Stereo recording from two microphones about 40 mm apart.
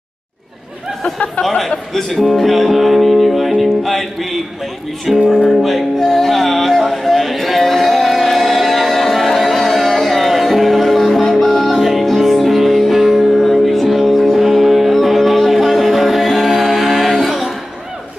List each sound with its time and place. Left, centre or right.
2.2 s music: centre
5.1 s speech: centre
5.6 s music: centre